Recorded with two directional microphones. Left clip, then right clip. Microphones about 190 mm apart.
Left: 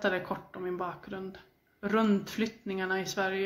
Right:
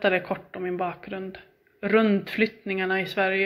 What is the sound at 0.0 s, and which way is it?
Speech, 15° right (ahead or behind).